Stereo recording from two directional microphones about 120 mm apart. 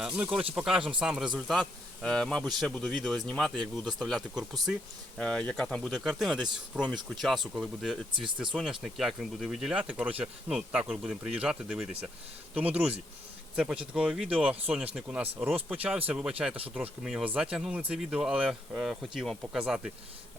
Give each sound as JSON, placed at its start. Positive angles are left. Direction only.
{"t": 0.0, "sound": "speech", "side_deg": -10}
{"t": 8.1, "sound": "speech", "side_deg": -40}
{"t": 8.8, "sound": "speech", "side_deg": 0}